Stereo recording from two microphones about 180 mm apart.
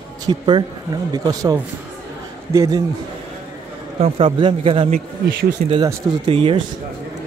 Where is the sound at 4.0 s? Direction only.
30° right (ahead or behind).